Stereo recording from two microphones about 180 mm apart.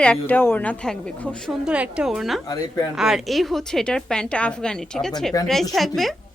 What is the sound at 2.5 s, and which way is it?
Speech, 20° left (ahead or behind).